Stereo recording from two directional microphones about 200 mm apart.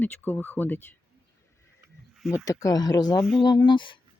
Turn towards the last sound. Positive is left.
turn(degrees=25)  # may be behind; listen again after turning